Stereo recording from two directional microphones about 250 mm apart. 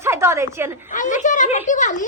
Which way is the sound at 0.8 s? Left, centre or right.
Left.